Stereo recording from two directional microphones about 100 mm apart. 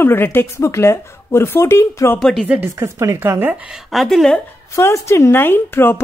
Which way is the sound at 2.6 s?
30° right (ahead or behind).